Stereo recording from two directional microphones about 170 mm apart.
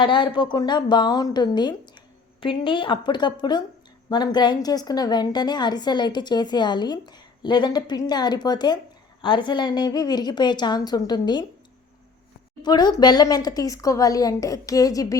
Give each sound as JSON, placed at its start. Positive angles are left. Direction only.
{"t": 0.0, "sound": "a woman's voice", "side_deg": 30}
{"t": 12.6, "sound": "a woman's voice", "side_deg": 25}